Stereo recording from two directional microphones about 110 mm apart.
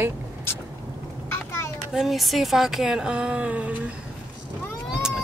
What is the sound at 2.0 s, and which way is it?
Speech, centre (ahead or behind).